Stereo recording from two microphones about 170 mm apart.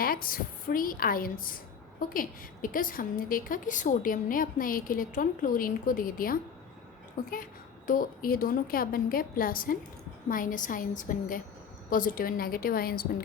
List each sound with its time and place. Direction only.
0.0 s a woman's voice: 60° left (ahead or behind)